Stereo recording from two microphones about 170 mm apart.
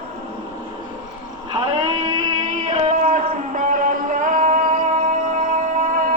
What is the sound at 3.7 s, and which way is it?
Music, 50° right (ahead or behind).